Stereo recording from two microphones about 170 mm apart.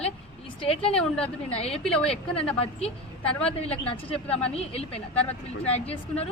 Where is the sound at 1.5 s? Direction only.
35° left (ahead or behind).